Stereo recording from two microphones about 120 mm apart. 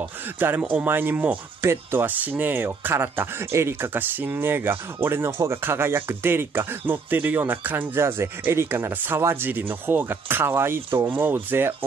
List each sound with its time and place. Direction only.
0.6 s speech: 10° right (ahead or behind)